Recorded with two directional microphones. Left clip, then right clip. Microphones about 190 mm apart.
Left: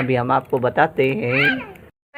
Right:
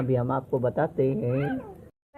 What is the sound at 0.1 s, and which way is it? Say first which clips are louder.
Speech: left 8 dB; 35° left (ahead or behind).